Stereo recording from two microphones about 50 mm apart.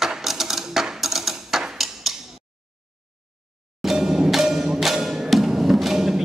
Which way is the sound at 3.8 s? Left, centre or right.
Centre.